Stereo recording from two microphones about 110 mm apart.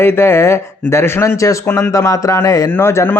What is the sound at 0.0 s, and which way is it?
A man's voice, 20° left (ahead or behind).